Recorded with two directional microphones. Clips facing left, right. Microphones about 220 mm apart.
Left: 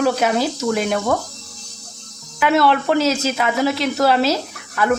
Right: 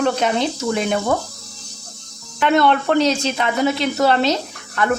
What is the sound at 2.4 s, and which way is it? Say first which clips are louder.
Speech: even; 5° left (ahead or behind).